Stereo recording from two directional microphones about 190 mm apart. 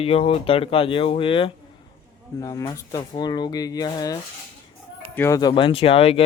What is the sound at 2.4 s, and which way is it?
Speech, 20° left (ahead or behind).